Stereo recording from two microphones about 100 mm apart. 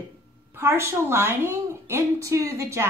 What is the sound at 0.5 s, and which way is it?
A woman's voice, 25° right (ahead or behind).